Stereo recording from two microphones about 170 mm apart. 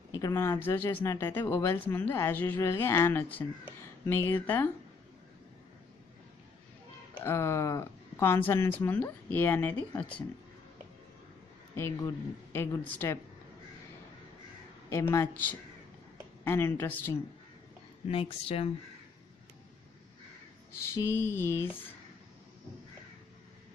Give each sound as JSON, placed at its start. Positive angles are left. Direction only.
{"t": 0.1, "sound": "speech", "side_deg": 15}
{"t": 7.2, "sound": "speech", "side_deg": 15}
{"t": 11.7, "sound": "speech", "side_deg": 15}
{"t": 14.9, "sound": "speech", "side_deg": 15}
{"t": 16.4, "sound": "speech", "side_deg": 15}
{"t": 18.0, "sound": "a woman's voice", "side_deg": 35}
{"t": 20.9, "sound": "speech", "side_deg": 15}